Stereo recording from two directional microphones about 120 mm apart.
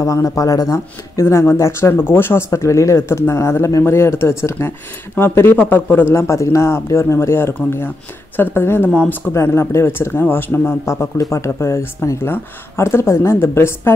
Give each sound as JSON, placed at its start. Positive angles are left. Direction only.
{"t": 0.0, "sound": "speech", "side_deg": 25}